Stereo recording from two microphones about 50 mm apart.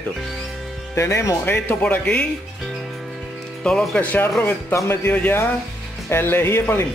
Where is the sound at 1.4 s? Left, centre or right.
Left.